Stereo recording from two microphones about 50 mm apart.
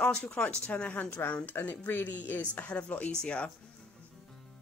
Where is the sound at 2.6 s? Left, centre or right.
Left.